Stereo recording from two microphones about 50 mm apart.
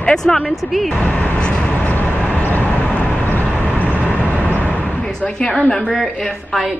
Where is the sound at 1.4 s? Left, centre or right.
Left.